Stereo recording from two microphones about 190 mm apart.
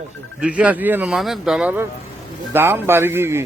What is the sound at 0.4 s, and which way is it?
A man's voice, 5° right (ahead or behind).